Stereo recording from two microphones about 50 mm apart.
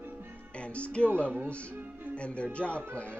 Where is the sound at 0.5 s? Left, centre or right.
Left.